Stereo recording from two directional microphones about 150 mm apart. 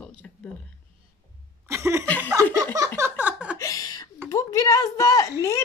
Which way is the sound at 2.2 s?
20° right (ahead or behind).